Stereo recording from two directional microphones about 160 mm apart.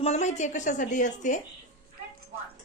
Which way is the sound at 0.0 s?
45° left (ahead or behind).